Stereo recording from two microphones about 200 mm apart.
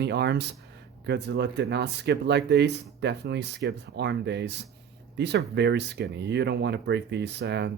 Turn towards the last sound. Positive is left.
turn(degrees=-60)  # may be behind; listen again after turning